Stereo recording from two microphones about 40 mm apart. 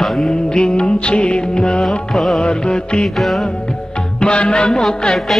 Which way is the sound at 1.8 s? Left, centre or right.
Centre.